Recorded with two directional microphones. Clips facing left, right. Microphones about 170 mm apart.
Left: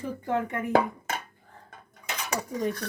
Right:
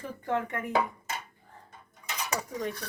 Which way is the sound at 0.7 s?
60° left (ahead or behind).